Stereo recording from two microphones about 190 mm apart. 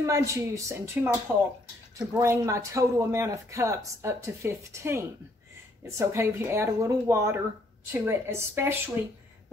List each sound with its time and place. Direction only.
0.0 s speech: 15° right (ahead or behind)